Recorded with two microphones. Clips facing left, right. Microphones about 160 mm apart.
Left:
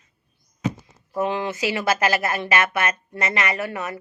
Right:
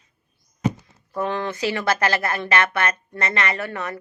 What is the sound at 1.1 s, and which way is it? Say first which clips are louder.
Speech: left 1 dB; 15° left (ahead or behind).